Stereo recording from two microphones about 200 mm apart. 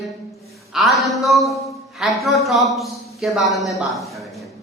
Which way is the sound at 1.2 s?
Centre (ahead or behind).